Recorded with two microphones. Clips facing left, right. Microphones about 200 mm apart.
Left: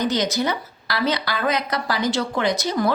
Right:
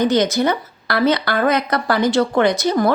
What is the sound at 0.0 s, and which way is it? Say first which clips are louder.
Speech: right 6 dB; 55° right (ahead or behind).